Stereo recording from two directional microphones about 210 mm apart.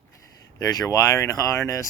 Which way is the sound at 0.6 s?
15° left (ahead or behind).